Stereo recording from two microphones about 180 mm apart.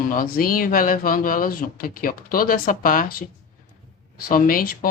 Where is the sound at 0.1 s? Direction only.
50° left (ahead or behind).